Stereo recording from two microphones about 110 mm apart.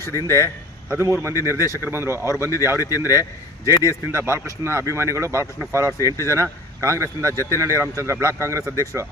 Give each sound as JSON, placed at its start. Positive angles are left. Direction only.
{"t": 0.2, "sound": "speech", "side_deg": -30}